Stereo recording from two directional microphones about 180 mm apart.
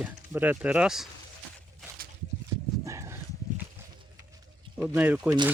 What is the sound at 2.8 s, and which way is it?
Dog, 15° right (ahead or behind).